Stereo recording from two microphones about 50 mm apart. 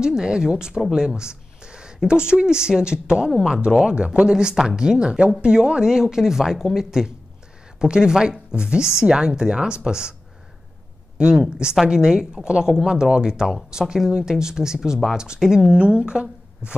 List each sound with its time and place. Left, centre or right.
0.0 s speech: centre
11.1 s a woman's voice: centre